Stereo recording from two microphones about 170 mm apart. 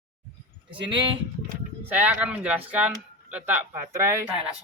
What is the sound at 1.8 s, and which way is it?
Speech, 10° right (ahead or behind).